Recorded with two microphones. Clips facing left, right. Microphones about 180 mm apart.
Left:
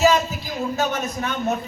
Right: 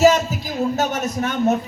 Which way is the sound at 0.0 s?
45° right (ahead or behind).